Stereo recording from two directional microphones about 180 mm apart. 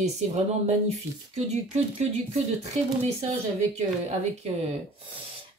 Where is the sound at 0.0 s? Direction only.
40° right (ahead or behind).